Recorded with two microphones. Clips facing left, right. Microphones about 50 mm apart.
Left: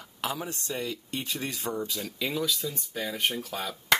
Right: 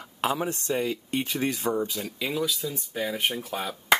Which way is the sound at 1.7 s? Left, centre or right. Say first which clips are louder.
Right 5 dB; right.